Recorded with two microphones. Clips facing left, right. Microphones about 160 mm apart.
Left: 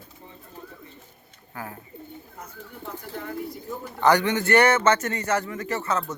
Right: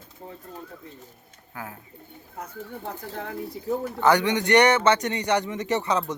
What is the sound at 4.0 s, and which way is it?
A man's voice, 10° right (ahead or behind).